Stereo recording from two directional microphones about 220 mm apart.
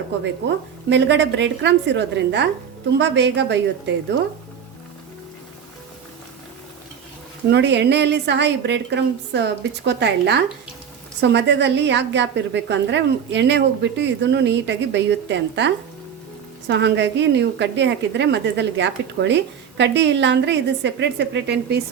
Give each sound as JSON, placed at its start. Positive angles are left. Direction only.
{"t": 0.9, "sound": "a woman's voice", "side_deg": -55}
{"t": 7.5, "sound": "a woman's voice", "side_deg": -50}